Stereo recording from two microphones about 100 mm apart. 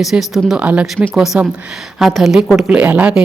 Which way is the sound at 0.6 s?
15° right (ahead or behind).